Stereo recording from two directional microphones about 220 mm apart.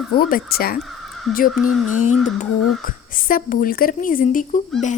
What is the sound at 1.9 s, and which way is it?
Wail, 85° left.